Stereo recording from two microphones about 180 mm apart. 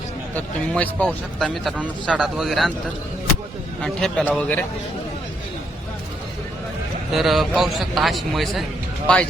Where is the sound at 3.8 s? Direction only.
5° left (ahead or behind).